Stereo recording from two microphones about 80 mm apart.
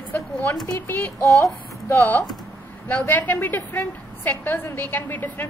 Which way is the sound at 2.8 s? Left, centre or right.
Left.